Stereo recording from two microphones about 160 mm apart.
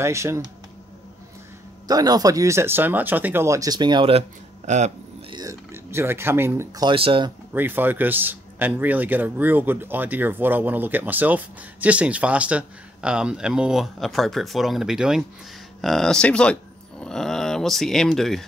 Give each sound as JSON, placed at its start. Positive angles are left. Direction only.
{"t": 0.0, "sound": "a man's voice", "side_deg": -15}
{"t": 1.9, "sound": "speech", "side_deg": -25}
{"t": 4.6, "sound": "speech", "side_deg": -45}
{"t": 5.3, "sound": "speech", "side_deg": -20}
{"t": 7.5, "sound": "a man's voice", "side_deg": -10}